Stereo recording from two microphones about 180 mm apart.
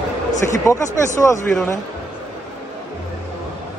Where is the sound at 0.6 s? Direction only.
15° left (ahead or behind).